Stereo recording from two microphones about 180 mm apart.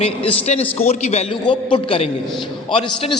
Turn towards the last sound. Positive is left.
turn(degrees=30)  # may be behind; listen again after turning